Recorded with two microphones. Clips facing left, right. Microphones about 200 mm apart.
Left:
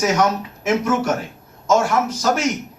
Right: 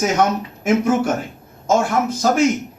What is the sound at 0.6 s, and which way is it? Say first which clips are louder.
A man's voice: right 2 dB; 55° right (ahead or behind).